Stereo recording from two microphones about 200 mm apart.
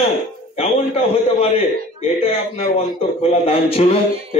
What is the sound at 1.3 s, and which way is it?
Speech, 30° left (ahead or behind).